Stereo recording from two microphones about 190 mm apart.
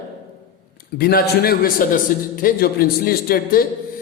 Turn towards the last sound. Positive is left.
turn(degrees=50)  # may be behind; listen again after turning